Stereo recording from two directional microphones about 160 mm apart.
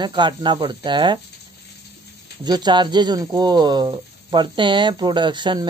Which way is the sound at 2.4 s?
25° right (ahead or behind).